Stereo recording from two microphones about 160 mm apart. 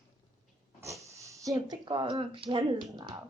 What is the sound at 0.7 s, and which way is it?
Speech, 20° right (ahead or behind).